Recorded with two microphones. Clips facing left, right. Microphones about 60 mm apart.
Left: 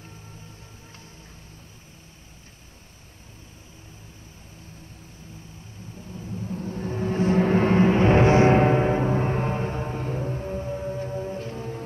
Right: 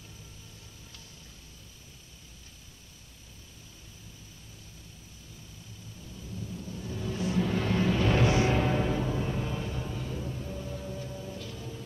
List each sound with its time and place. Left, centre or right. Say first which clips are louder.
6.1 s music: left 8 dB; left